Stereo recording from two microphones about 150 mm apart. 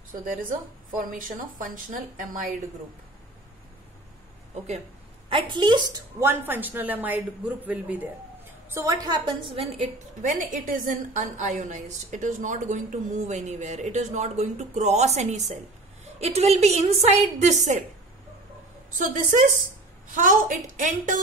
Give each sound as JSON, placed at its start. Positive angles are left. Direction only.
{"t": 0.1, "sound": "a woman's voice", "side_deg": -65}
{"t": 5.3, "sound": "a woman's voice", "side_deg": -35}
{"t": 6.1, "sound": "a woman's voice", "side_deg": -15}
{"t": 10.2, "sound": "a woman's voice", "side_deg": -60}
{"t": 18.9, "sound": "a woman's voice", "side_deg": -60}